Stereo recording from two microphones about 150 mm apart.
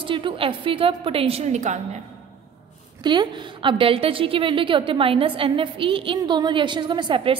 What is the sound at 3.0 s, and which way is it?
A woman's voice, 30° right (ahead or behind).